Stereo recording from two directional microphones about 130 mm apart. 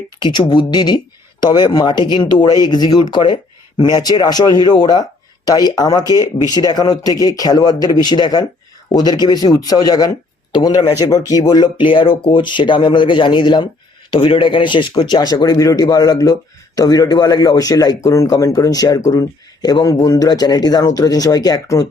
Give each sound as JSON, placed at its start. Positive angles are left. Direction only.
{"t": 0.2, "sound": "speech", "side_deg": 35}